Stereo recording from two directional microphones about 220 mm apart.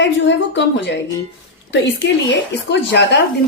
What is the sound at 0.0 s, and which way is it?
A woman's voice, 55° left (ahead or behind).